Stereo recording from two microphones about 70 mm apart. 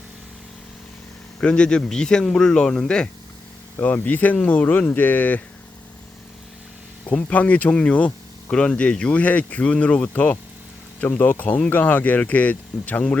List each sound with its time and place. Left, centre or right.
1.4 s a man's voice: centre
3.8 s speech: left
7.1 s speech: centre